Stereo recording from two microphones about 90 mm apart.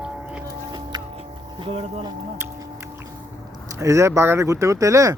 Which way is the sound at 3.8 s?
35° right (ahead or behind).